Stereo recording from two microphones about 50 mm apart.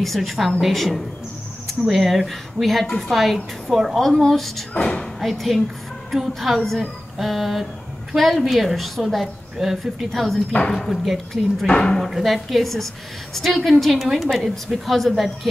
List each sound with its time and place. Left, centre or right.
0.0 s a woman's voice: centre
4.0 s a woman's voice: centre
4.7 s speech: left
5.2 s a woman's voice: centre
10.6 s speech: centre
12.0 s a woman's voice: centre